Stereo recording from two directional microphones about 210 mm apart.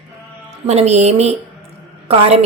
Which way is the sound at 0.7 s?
30° right (ahead or behind).